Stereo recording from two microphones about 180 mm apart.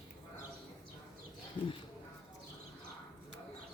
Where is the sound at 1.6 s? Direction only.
25° left (ahead or behind).